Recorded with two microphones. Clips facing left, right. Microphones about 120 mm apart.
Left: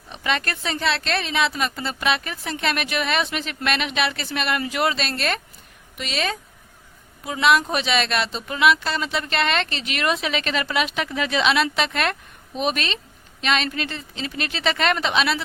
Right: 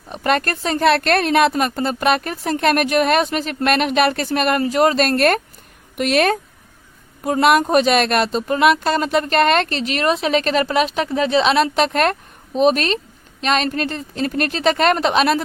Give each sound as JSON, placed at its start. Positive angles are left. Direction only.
{"t": 0.1, "sound": "a woman's voice", "side_deg": -45}